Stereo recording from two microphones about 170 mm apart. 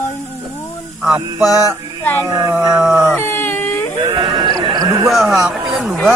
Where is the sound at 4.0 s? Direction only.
25° right (ahead or behind).